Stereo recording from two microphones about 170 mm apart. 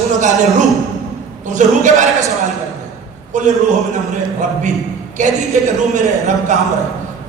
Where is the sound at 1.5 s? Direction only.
45° right (ahead or behind).